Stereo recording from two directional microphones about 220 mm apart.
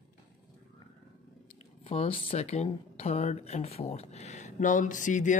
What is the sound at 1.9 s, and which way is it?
Speech, 25° left (ahead or behind).